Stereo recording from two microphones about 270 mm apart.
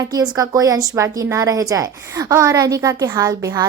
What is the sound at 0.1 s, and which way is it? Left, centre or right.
A woman's voice, centre.